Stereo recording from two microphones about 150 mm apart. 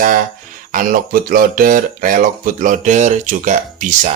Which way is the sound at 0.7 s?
65° right (ahead or behind).